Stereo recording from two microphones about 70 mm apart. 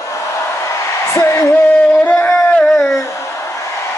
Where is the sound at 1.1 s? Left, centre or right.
Left.